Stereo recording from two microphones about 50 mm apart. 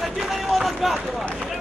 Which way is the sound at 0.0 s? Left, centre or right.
Centre.